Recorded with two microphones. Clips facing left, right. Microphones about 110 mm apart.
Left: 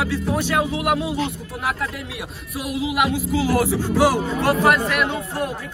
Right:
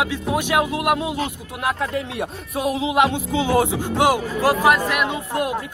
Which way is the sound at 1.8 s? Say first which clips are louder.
Right 5 dB; 30° right (ahead or behind).